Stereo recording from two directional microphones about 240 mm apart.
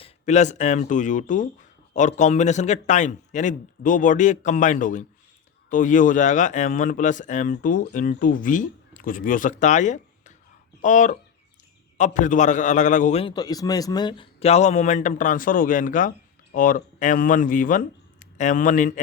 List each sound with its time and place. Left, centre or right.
0.0 s speech: left